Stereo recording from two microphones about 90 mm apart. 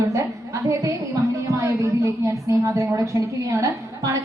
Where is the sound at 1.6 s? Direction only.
35° right (ahead or behind).